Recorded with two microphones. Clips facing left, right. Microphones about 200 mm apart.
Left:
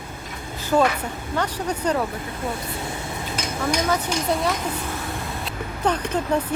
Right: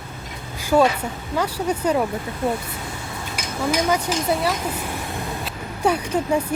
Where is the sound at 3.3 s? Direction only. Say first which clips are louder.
Right 2 dB; 10° right (ahead or behind).